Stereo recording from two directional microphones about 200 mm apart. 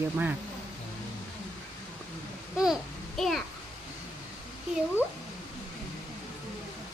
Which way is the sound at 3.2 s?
Centre (ahead or behind).